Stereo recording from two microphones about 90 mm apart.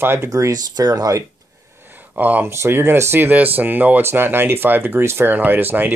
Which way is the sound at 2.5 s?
30° right (ahead or behind).